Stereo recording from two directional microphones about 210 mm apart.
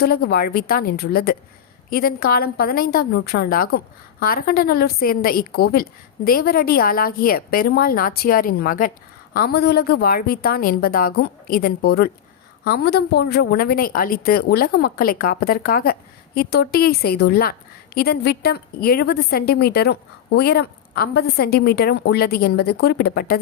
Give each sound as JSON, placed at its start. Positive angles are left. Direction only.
{"t": 0.0, "sound": "a woman's voice", "side_deg": 45}